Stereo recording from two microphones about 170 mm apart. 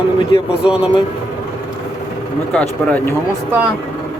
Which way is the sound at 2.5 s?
10° left (ahead or behind).